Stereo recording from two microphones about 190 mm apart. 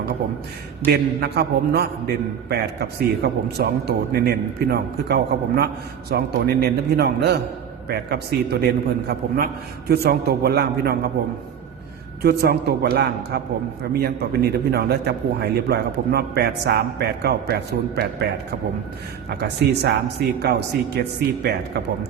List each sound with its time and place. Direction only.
0.9 s a man's voice: 60° right (ahead or behind)
12.2 s a man's voice: 55° right (ahead or behind)
19.4 s a man's voice: 60° right (ahead or behind)